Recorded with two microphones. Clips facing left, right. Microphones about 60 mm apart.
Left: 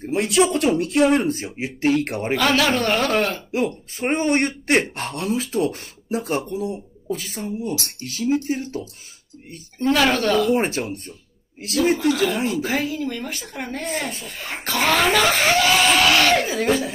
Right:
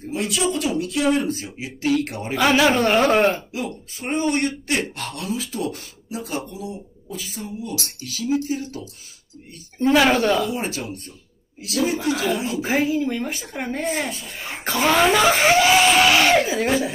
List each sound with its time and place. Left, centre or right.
0.0 s speech: left
2.0 s speech: left
2.3 s speech: centre
4.0 s speech: left
7.8 s speech: left
8.3 s speech: left
9.8 s speech: centre
10.5 s speech: left
12.8 s speech: centre
14.2 s speech: centre